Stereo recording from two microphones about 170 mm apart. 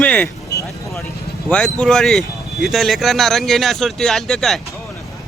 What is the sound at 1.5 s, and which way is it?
Speech, 5° left (ahead or behind).